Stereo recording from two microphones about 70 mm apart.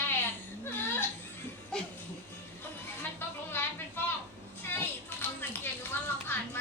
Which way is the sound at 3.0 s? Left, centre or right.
Left.